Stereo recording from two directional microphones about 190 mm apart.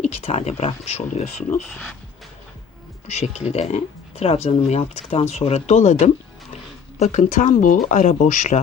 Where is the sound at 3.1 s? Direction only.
35° left (ahead or behind).